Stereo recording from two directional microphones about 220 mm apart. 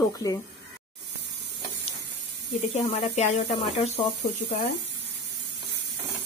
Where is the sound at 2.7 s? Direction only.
30° left (ahead or behind).